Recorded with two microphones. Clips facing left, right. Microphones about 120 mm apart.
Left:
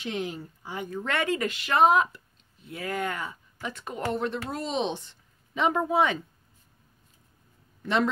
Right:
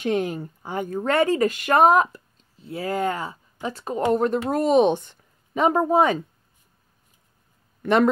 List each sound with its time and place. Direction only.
0.0 s speech: 50° right (ahead or behind)
7.8 s speech: 55° right (ahead or behind)